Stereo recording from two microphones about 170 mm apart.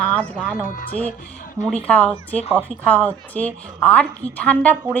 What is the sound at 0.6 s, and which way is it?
Speech, 55° left (ahead or behind).